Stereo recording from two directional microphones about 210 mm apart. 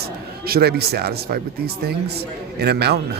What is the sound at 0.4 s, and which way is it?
Speech, 45° right (ahead or behind).